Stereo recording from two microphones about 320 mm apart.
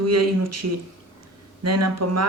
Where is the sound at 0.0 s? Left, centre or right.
Right.